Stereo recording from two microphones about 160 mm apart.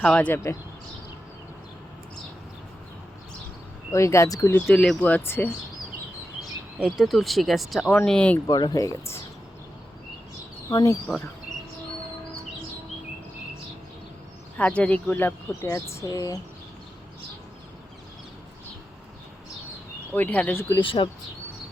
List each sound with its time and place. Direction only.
0.0 s speech: 10° left (ahead or behind)
3.9 s speech: 20° left (ahead or behind)
6.7 s speech: 5° right (ahead or behind)
8.4 s speech: 25° left (ahead or behind)
10.7 s speech: 20° left (ahead or behind)
14.6 s speech: 10° left (ahead or behind)
20.1 s speech: 10° left (ahead or behind)
20.8 s speech: 35° left (ahead or behind)